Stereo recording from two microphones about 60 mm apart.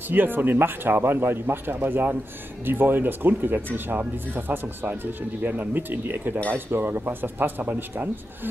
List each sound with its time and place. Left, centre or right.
0.1 s speech: right